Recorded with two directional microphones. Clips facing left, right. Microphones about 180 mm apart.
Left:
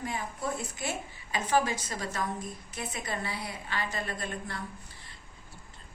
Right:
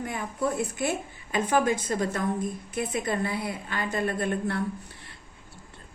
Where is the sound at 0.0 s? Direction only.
55° right (ahead or behind).